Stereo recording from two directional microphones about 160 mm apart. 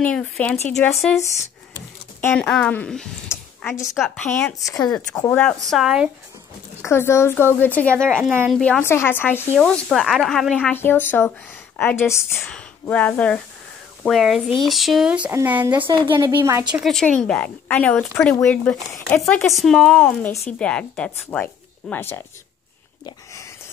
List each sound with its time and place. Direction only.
0.0 s a woman's voice: 5° left (ahead or behind)
2.2 s a woman's voice: 5° left (ahead or behind)
3.3 s a sound: 15° left (ahead or behind)
3.8 s speech: centre (ahead or behind)
4.2 s a woman's voice: 10° left (ahead or behind)
4.6 s speech: 25° left (ahead or behind)
5.3 s a woman's voice: 5° left (ahead or behind)
6.9 s a woman's voice: 15° left (ahead or behind)
9.6 s a woman's voice: centre (ahead or behind)
14.6 s a sound: centre (ahead or behind)
15.7 s a woman's voice: 30° right (ahead or behind)
16.7 s a woman's voice: centre (ahead or behind)